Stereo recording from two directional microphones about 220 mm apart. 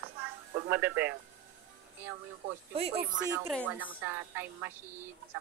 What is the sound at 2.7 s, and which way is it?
Speech, 25° right (ahead or behind).